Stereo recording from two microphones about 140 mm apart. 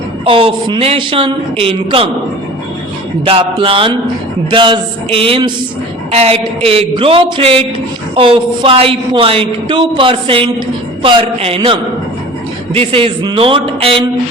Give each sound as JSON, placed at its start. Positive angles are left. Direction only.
{"t": 0.3, "sound": "a woman's voice", "side_deg": -40}
{"t": 3.2, "sound": "a woman's voice", "side_deg": -40}